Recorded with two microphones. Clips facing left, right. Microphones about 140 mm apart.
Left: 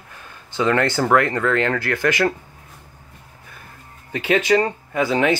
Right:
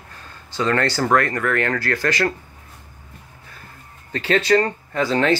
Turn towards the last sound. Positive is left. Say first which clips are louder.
# even
turn(degrees=10)  # may be behind; listen again after turning